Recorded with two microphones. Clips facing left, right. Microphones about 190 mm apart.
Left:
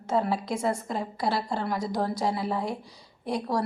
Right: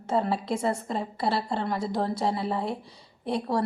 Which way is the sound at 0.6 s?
Centre (ahead or behind).